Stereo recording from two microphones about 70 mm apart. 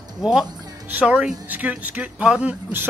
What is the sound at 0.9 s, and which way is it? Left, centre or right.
Speech, centre.